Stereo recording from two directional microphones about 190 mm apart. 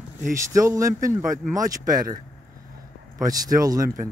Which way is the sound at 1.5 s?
20° right (ahead or behind).